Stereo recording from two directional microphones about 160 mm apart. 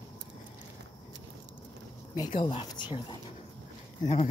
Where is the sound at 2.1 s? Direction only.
30° left (ahead or behind).